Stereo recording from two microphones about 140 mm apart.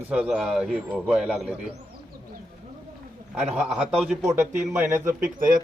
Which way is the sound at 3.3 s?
5° right (ahead or behind).